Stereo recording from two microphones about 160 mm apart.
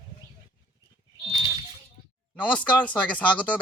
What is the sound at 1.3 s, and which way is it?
Fire alarm, 25° right (ahead or behind).